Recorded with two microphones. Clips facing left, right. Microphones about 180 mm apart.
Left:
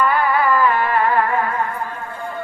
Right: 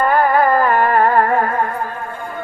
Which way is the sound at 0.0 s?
45° right (ahead or behind).